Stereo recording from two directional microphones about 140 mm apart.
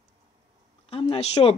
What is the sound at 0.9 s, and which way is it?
Speech, 40° left (ahead or behind).